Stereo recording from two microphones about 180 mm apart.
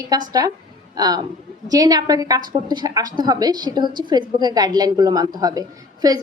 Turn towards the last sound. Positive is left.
turn(degrees=-20)  # may be behind; listen again after turning